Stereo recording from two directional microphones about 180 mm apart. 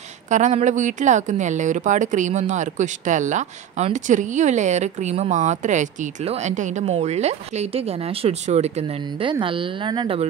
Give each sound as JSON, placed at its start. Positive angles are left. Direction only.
{"t": 0.3, "sound": "speech", "side_deg": -40}